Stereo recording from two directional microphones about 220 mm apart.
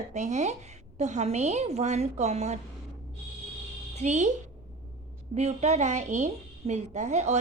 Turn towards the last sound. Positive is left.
turn(degrees=-30)  # may be behind; listen again after turning